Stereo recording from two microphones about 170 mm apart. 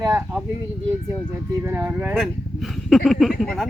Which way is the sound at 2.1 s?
Centre (ahead or behind).